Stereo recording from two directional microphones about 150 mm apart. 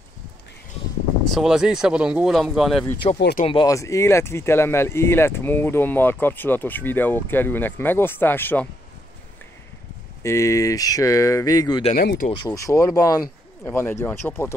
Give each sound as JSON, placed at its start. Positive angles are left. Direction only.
{"t": 1.3, "sound": "speech", "side_deg": -5}
{"t": 3.0, "sound": "speech", "side_deg": 40}
{"t": 3.6, "sound": "speech", "side_deg": 20}
{"t": 10.2, "sound": "speech", "side_deg": 20}
{"t": 12.0, "sound": "speech", "side_deg": 90}
{"t": 12.4, "sound": "speech", "side_deg": 20}